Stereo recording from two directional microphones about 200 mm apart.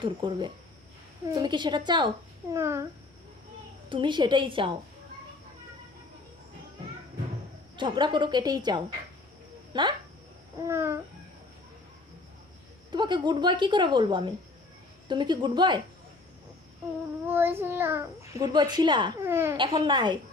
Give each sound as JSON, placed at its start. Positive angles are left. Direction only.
{"t": 0.0, "sound": "a woman's voice", "side_deg": -25}
{"t": 3.8, "sound": "a woman's voice", "side_deg": -25}
{"t": 7.8, "sound": "a woman's voice", "side_deg": -20}
{"t": 10.7, "sound": "a child's voice", "side_deg": -15}
{"t": 12.9, "sound": "a woman's voice", "side_deg": -20}
{"t": 17.2, "sound": "a child's voice", "side_deg": -10}
{"t": 19.3, "sound": "a child's voice", "side_deg": -10}
{"t": 19.5, "sound": "a woman's voice", "side_deg": -25}